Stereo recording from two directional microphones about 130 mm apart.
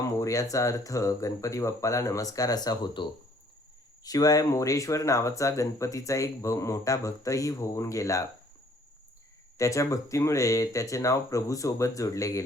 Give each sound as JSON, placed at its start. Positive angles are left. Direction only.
{"t": 0.2, "sound": "speech", "side_deg": 25}
{"t": 9.6, "sound": "speech", "side_deg": 25}